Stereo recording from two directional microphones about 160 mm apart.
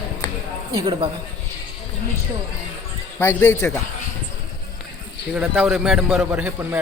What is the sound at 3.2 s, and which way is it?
Speech, 10° left (ahead or behind).